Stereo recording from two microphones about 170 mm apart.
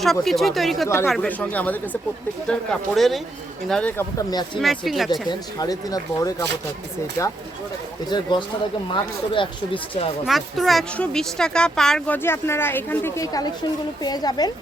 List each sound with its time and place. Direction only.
0.0 s speech: centre (ahead or behind)
4.2 s speech: 25° left (ahead or behind)
4.6 s speech: centre (ahead or behind)
5.3 s speech: 20° left (ahead or behind)
10.2 s speech: centre (ahead or behind); by 14.5 s 25° left (ahead or behind)